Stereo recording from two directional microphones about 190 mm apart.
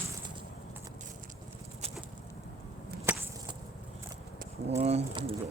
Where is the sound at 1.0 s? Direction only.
40° right (ahead or behind).